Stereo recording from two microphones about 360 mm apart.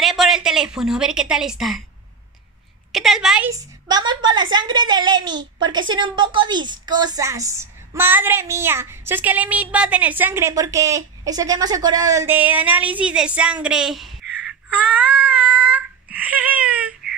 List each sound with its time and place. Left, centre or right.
0.0 s a woman's voice: centre
2.9 s a woman's voice: centre